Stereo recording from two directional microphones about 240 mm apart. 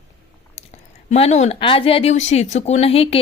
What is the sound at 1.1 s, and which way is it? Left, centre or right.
Speech, left.